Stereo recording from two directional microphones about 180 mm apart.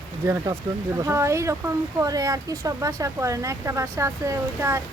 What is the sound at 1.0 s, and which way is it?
Speech, 15° right (ahead or behind).